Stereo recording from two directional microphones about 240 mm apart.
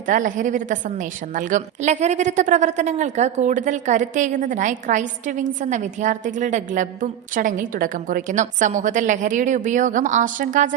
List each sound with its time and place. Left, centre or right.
0.1 s a woman's voice: right